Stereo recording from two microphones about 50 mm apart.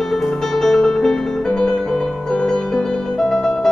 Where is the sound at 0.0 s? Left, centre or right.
Centre.